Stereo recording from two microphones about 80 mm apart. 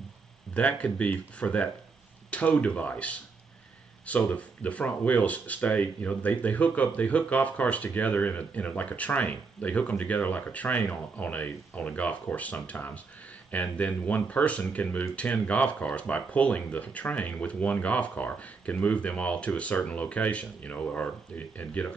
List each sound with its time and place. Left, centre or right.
0.6 s speech: centre